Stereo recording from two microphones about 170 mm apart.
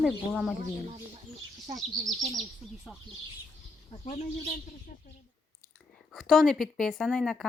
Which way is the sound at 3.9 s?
35° left (ahead or behind).